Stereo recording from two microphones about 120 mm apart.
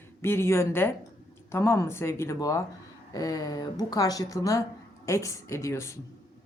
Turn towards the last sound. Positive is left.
turn(degrees=25)  # may be behind; listen again after turning